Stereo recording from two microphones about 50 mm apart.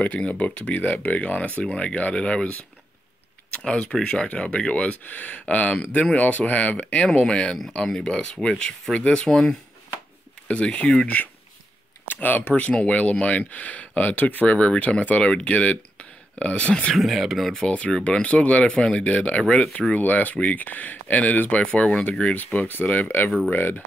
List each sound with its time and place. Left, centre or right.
0.0 s speech: left
3.5 s speech: centre; by 7.0 s left
7.2 s speech: centre
9.2 s speech: centre
10.5 s speech: centre
12.1 s speech: left
16.9 s speech: centre
17.6 s speech: left
19.9 s speech: left
21.6 s speech: centre
22.4 s speech: left